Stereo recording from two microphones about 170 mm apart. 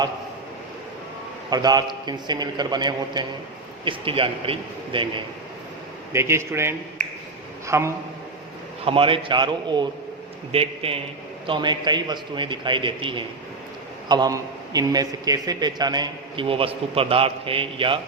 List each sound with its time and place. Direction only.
1.5 s a man's voice: 25° right (ahead or behind)
6.1 s speech: 15° right (ahead or behind)
8.8 s a man's voice: 30° right (ahead or behind)